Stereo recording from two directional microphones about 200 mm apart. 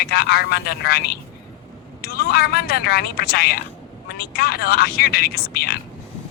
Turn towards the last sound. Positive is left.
turn(degrees=50)  # may be behind; listen again after turning